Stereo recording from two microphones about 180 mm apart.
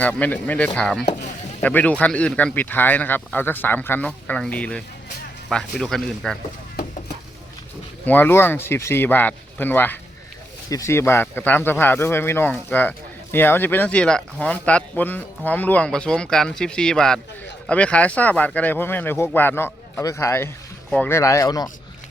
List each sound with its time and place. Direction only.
0.0 s speech: 10° left (ahead or behind)
8.0 s speech: 10° left (ahead or behind)